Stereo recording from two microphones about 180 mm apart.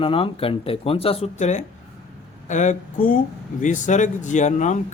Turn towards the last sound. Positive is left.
turn(degrees=40)  # may be behind; listen again after turning